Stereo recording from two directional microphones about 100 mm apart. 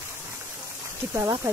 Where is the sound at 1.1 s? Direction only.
30° right (ahead or behind).